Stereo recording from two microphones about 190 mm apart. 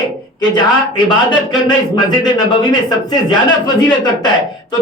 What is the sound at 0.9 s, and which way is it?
Speech, 25° left (ahead or behind).